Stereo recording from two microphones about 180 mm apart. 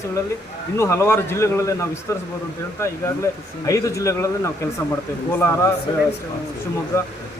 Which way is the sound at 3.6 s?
20° left (ahead or behind).